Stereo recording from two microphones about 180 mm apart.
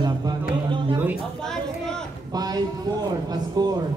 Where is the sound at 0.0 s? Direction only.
20° right (ahead or behind).